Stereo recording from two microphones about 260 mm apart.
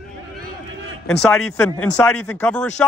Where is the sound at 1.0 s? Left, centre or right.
Centre.